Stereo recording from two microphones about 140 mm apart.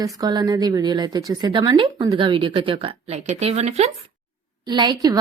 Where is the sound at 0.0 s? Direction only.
25° right (ahead or behind); by 3.9 s 50° right (ahead or behind).